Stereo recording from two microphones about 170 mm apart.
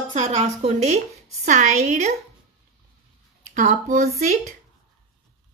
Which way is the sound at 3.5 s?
45° right (ahead or behind).